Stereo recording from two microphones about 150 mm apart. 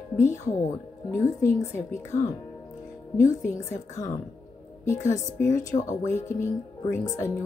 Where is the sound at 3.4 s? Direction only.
20° left (ahead or behind).